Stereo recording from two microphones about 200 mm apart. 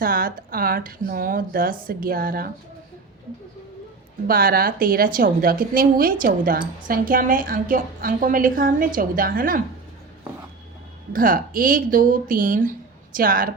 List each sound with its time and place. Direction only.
0.0 s a woman's voice: 45° right (ahead or behind)
4.3 s a woman's voice: 45° right (ahead or behind)
11.1 s a woman's voice: 45° right (ahead or behind)